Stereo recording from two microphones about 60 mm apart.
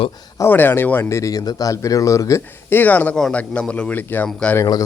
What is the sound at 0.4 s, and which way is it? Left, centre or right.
Speech, left.